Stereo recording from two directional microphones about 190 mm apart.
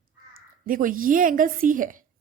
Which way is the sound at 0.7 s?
45° right (ahead or behind).